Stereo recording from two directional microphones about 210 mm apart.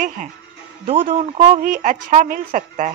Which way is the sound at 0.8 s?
25° right (ahead or behind).